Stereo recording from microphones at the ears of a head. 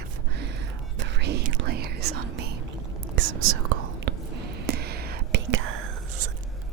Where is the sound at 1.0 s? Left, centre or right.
Right.